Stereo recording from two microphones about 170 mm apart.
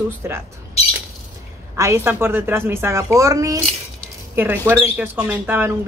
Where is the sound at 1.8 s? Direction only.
15° right (ahead or behind).